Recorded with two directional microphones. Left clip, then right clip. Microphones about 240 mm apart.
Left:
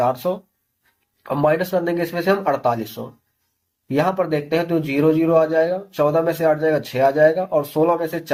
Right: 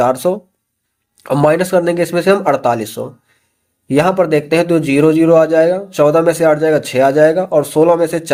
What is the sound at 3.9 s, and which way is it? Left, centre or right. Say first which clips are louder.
A man's voice: right 7 dB; right.